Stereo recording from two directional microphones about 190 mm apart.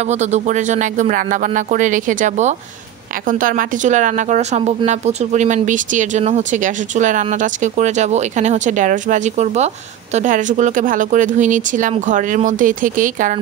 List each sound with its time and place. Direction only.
0.0 s speech: 35° right (ahead or behind)